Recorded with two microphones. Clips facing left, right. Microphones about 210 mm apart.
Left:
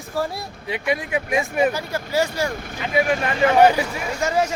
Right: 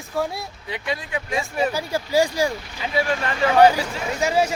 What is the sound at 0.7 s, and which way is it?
Speech, 20° left (ahead or behind).